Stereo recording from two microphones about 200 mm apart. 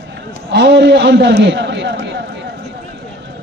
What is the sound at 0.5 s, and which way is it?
A man's voice, 60° right (ahead or behind).